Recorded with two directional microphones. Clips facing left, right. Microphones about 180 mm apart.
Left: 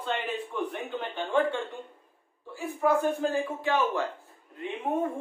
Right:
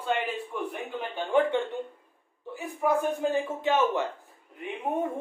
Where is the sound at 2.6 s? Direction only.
15° right (ahead or behind).